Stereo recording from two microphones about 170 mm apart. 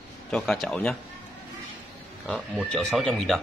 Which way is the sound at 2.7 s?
5° left (ahead or behind).